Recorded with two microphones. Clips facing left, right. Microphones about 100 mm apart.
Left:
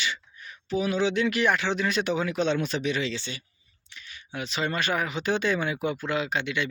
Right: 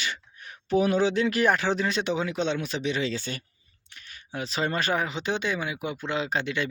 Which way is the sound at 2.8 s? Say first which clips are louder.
Even; 30° right (ahead or behind).